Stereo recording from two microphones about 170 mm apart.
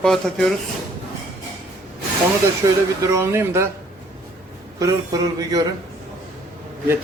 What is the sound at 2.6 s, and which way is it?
Speech, 20° right (ahead or behind).